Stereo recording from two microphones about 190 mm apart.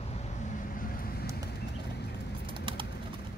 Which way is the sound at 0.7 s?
50° left (ahead or behind).